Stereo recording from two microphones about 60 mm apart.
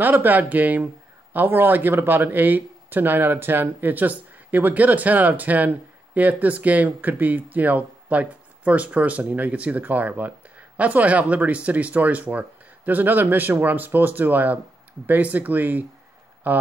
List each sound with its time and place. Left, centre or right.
0.0 s speech: right